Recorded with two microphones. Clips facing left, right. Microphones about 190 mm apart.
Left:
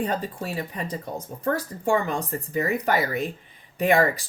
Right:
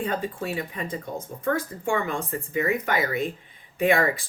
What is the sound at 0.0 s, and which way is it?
Speech, 40° left (ahead or behind).